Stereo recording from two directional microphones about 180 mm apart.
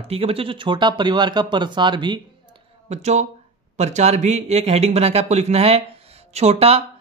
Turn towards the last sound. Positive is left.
turn(degrees=-35)  # may be behind; listen again after turning